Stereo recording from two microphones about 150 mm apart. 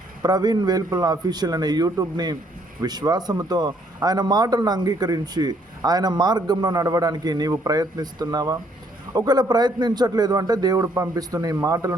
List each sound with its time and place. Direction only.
0.2 s speech: 25° right (ahead or behind)